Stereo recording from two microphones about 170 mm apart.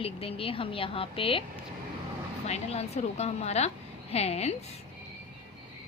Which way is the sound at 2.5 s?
40° left (ahead or behind).